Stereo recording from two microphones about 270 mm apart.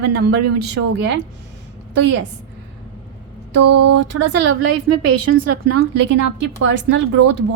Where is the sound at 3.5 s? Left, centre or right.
Right.